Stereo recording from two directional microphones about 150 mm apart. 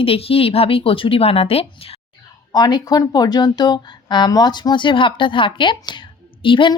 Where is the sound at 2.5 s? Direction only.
25° left (ahead or behind).